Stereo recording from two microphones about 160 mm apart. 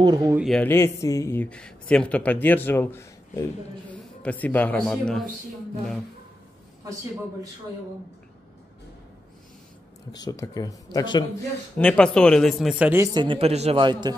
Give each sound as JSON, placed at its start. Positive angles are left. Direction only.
{"t": 0.0, "sound": "speech", "side_deg": -25}
{"t": 0.4, "sound": "speech", "side_deg": 0}
{"t": 0.7, "sound": "a man's voice", "side_deg": 15}
{"t": 10.1, "sound": "speech", "side_deg": 25}
{"t": 11.8, "sound": "speech", "side_deg": 5}
{"t": 13.0, "sound": "a man's voice", "side_deg": -30}